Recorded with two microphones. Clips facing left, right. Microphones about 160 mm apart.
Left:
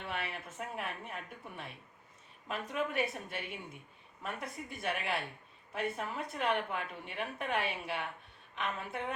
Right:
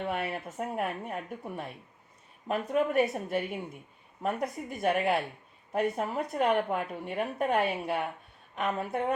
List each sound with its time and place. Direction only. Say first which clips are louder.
0.0 s a woman's voice: right 8 dB; 45° right (ahead or behind)